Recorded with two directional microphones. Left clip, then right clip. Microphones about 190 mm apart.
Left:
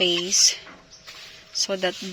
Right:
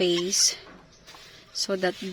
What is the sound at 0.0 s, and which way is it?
Speech, 25° right (ahead or behind).